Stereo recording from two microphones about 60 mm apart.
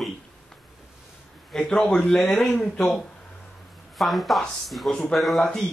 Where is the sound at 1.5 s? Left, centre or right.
Centre.